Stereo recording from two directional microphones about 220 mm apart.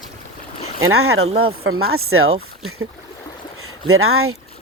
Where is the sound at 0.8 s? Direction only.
75° right (ahead or behind).